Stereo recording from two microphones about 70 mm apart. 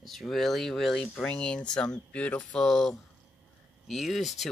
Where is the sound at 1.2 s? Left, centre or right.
Centre.